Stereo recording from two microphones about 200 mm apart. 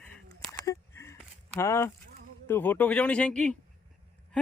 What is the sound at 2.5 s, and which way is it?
Speech, 10° left (ahead or behind).